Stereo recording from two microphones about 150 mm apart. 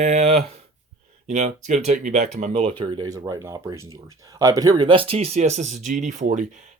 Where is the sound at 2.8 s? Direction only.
30° right (ahead or behind).